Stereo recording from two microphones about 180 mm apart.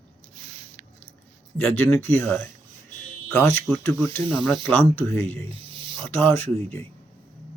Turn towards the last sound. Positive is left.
turn(degrees=10)  # may be behind; listen again after turning